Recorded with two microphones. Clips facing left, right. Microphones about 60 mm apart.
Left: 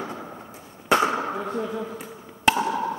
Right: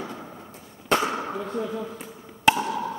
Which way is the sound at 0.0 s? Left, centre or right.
Centre.